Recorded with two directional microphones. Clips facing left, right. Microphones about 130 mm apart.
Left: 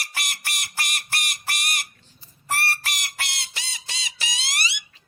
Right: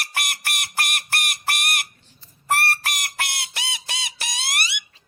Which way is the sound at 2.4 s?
55° right (ahead or behind).